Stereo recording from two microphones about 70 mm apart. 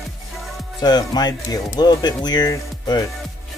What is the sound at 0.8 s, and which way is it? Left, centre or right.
Speech, left.